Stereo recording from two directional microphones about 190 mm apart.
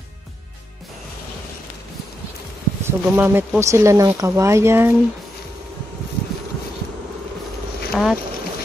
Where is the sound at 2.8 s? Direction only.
10° right (ahead or behind).